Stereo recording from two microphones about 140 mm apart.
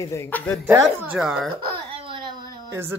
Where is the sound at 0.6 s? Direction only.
20° right (ahead or behind).